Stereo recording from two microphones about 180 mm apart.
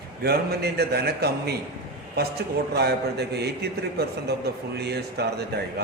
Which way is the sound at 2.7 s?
65° right (ahead or behind).